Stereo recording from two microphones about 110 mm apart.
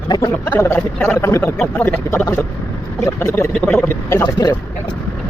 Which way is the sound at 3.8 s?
20° left (ahead or behind).